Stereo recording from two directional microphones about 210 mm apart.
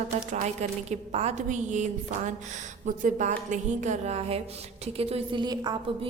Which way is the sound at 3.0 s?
35° right (ahead or behind).